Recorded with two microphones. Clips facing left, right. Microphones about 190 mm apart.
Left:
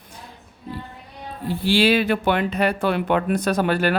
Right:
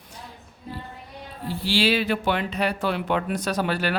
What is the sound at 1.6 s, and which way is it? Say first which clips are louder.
Speech: left 5 dB; 55° left (ahead or behind).